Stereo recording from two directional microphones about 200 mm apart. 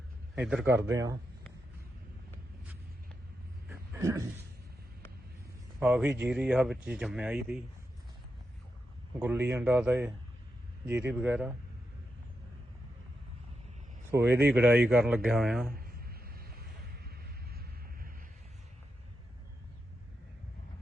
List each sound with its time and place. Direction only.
0.3 s a man's voice: centre (ahead or behind)
0.6 s speech: 10° right (ahead or behind)
3.7 s a sound: 10° right (ahead or behind)
5.8 s speech: 5° right (ahead or behind)
9.1 s speech: 10° right (ahead or behind)
14.1 s speech: 10° right (ahead or behind)
15.7 s a sound: 50° right (ahead or behind)